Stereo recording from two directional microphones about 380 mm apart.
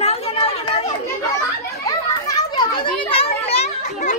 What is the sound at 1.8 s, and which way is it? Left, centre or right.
Children playing, centre.